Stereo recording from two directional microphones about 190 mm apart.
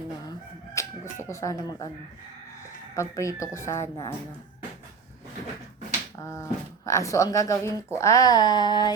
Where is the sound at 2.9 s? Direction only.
15° left (ahead or behind).